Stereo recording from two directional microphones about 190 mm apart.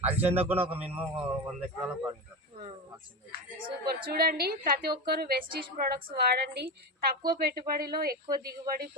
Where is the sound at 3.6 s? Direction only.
50° right (ahead or behind).